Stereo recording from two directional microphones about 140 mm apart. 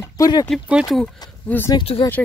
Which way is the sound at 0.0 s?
25° left (ahead or behind).